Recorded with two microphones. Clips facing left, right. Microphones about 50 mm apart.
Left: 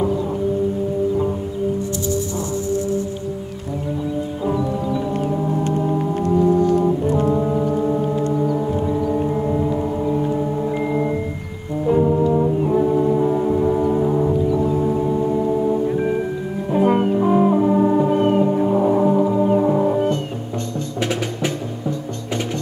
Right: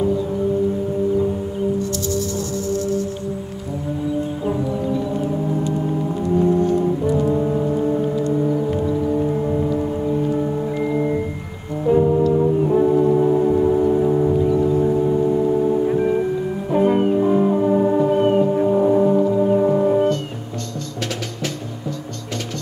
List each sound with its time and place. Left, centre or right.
5.1 s gong: left
6.8 s music: left
7.3 s music: centre
7.7 s gong: centre
9.1 s a sound: centre
10.3 s gong: centre
10.9 s music: centre
11.8 s organ: centre
12.2 s brass instrument: centre
12.7 s brass instrument: centre
14.6 s organ: centre
16.0 s music: centre